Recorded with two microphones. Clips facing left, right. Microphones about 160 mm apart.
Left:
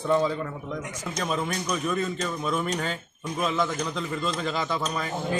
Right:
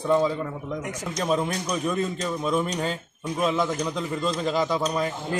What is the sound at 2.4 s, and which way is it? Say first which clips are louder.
Cutlery: right 3 dB; centre (ahead or behind).